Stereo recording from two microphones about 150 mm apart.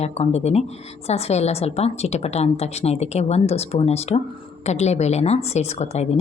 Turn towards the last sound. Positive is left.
turn(degrees=45)  # may be behind; listen again after turning